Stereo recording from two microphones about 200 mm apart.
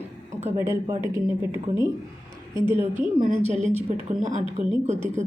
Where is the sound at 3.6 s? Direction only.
30° right (ahead or behind).